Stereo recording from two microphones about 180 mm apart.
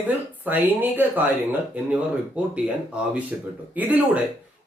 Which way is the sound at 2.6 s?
5° right (ahead or behind).